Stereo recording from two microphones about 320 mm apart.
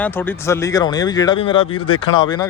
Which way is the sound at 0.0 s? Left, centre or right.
Centre.